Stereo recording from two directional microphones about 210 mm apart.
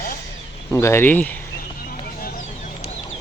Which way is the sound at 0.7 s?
10° left (ahead or behind).